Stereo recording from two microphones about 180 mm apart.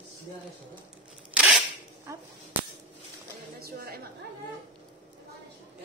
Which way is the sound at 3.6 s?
55° right (ahead or behind).